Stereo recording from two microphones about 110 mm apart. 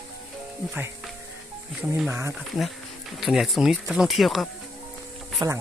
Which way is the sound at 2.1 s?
25° right (ahead or behind).